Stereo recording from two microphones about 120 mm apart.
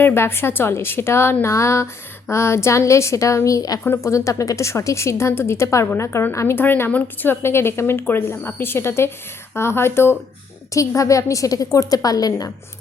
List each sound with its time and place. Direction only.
0.0 s a woman's voice: 20° left (ahead or behind)